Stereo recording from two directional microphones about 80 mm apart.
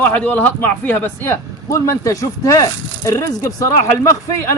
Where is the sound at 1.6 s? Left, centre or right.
Left.